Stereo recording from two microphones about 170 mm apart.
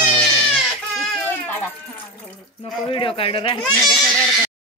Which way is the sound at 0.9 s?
10° left (ahead or behind).